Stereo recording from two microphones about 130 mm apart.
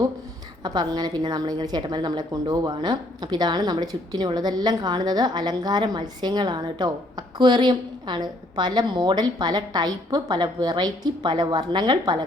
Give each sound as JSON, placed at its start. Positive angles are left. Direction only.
{"t": 0.6, "sound": "a woman's voice", "side_deg": -30}